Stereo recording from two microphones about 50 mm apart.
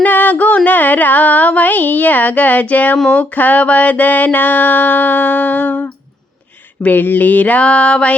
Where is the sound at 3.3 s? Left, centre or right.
Left.